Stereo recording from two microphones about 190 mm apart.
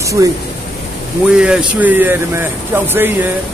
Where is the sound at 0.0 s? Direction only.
15° right (ahead or behind).